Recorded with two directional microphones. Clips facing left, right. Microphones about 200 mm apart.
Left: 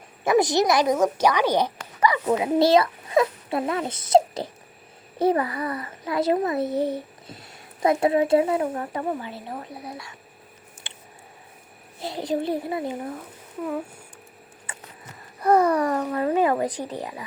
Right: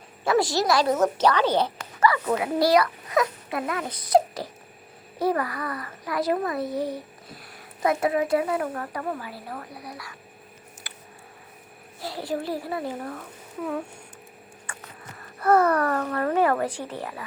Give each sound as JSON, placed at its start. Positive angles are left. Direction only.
{"t": 0.3, "sound": "a child's voice", "side_deg": 20}
{"t": 10.8, "sound": "a sound", "side_deg": 25}
{"t": 11.9, "sound": "a child's voice", "side_deg": 20}
{"t": 15.4, "sound": "speech", "side_deg": 15}